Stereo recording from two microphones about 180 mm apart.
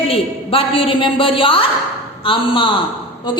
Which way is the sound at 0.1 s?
30° left (ahead or behind).